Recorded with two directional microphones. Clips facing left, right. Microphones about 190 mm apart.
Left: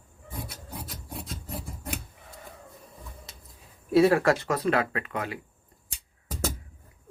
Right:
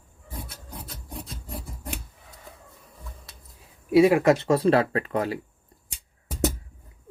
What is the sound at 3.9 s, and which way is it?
Speech, 15° right (ahead or behind).